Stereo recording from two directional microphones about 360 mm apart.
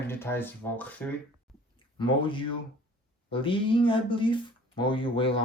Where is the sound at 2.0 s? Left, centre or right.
Centre.